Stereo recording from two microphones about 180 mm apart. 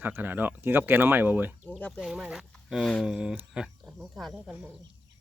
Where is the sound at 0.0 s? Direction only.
10° right (ahead or behind).